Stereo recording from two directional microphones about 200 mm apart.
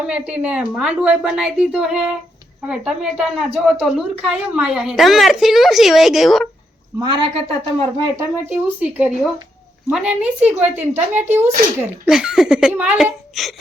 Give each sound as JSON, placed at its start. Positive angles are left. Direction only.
{"t": 0.1, "sound": "a woman's voice", "side_deg": -5}
{"t": 7.0, "sound": "speech", "side_deg": -25}
{"t": 8.2, "sound": "a woman's voice", "side_deg": -10}